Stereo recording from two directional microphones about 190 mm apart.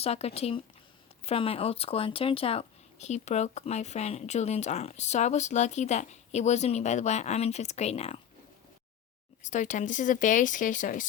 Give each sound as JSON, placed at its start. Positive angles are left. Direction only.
{"t": 0.0, "sound": "speech", "side_deg": 35}
{"t": 9.4, "sound": "speech", "side_deg": 40}